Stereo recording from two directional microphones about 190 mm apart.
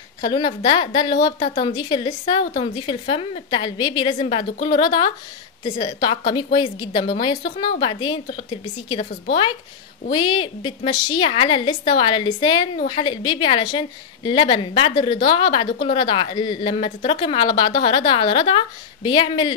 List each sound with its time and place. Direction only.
0.3 s a woman's voice: 20° left (ahead or behind)